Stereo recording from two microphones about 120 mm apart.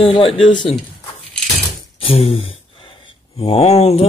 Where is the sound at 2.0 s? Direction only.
60° left (ahead or behind).